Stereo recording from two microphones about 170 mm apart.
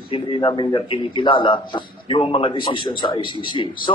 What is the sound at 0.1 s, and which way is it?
A man's voice, 30° left (ahead or behind).